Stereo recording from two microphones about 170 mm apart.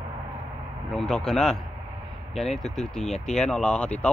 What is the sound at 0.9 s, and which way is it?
Speech, 5° left (ahead or behind).